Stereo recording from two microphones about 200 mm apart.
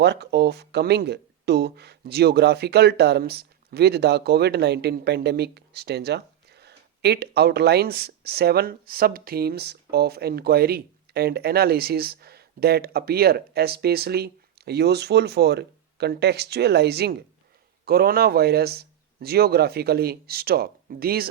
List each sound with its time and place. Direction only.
0.0 s speech: 55° right (ahead or behind)